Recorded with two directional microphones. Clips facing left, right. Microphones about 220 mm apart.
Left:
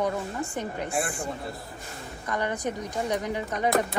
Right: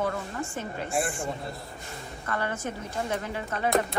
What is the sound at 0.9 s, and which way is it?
Speech, centre (ahead or behind).